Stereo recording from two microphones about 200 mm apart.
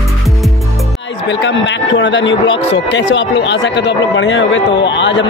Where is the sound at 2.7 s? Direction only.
60° left (ahead or behind).